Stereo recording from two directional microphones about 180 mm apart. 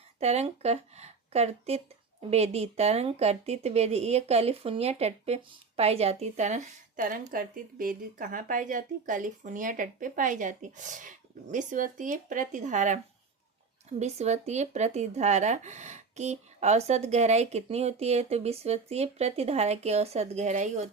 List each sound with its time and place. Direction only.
0.2 s a woman's voice: 35° right (ahead or behind)
14.0 s speech: 40° right (ahead or behind)